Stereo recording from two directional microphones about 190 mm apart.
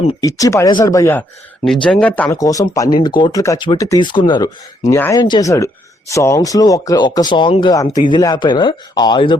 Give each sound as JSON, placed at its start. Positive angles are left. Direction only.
{"t": 0.2, "sound": "speech", "side_deg": 20}
{"t": 1.6, "sound": "speech", "side_deg": 5}
{"t": 2.4, "sound": "speech", "side_deg": 20}